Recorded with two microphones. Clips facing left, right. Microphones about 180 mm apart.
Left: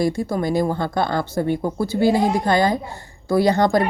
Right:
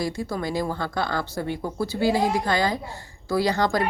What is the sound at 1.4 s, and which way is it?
Speech, 30° left (ahead or behind).